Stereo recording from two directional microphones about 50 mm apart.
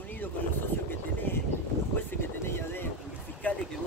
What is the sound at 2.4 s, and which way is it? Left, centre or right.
Speech, left.